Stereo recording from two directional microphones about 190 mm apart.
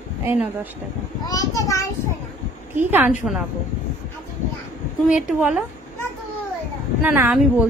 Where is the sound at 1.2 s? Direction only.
20° left (ahead or behind).